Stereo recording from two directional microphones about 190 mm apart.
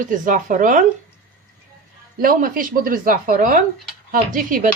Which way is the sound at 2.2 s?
45° right (ahead or behind).